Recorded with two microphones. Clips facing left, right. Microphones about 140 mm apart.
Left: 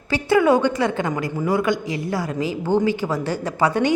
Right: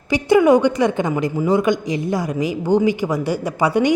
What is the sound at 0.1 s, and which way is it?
A woman's voice, 15° right (ahead or behind).